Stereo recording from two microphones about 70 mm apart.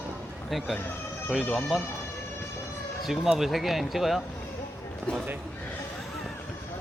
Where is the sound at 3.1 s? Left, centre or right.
Centre.